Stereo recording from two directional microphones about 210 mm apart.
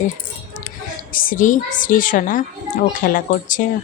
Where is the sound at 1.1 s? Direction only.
40° left (ahead or behind).